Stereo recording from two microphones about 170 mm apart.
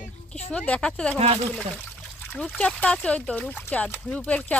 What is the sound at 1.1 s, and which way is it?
Speech, 35° right (ahead or behind).